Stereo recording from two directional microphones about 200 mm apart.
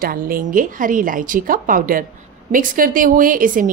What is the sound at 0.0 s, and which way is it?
A woman's voice, 45° right (ahead or behind).